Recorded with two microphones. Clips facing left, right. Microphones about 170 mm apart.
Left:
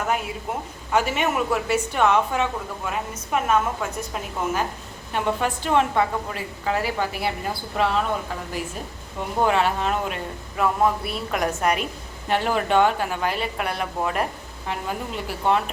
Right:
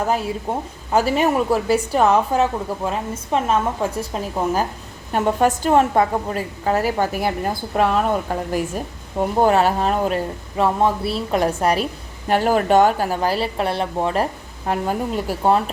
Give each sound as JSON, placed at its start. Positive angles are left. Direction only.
{"t": 0.1, "sound": "a woman's voice", "side_deg": -35}
{"t": 14.7, "sound": "speech", "side_deg": -40}